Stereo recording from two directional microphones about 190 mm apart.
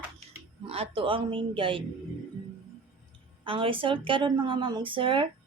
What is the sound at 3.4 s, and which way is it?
Speech, 25° right (ahead or behind).